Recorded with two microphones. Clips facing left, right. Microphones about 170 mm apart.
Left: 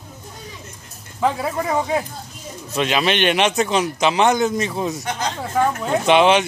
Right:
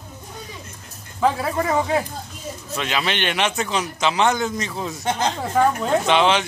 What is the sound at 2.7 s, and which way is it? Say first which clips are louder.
A man's voice: left 5 dB; 20° left (ahead or behind).